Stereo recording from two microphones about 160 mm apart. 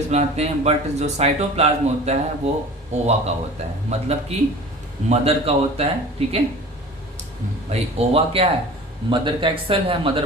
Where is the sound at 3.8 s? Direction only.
40° right (ahead or behind).